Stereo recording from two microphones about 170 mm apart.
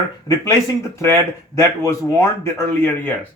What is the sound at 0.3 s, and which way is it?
A man's voice, 20° left (ahead or behind).